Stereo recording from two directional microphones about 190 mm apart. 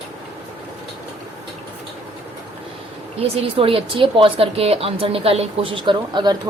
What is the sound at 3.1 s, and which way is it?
A woman's voice, 30° right (ahead or behind).